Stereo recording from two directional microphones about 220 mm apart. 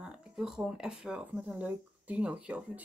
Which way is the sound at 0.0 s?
5° right (ahead or behind).